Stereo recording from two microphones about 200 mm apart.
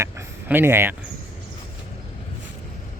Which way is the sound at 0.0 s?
10° right (ahead or behind).